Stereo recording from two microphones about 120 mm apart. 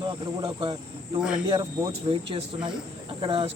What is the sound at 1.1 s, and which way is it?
Speech, 5° right (ahead or behind).